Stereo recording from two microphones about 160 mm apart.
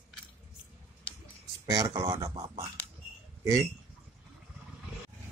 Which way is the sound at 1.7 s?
20° right (ahead or behind).